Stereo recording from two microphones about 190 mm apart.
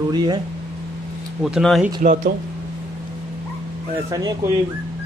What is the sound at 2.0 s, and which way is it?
Speech, 45° right (ahead or behind).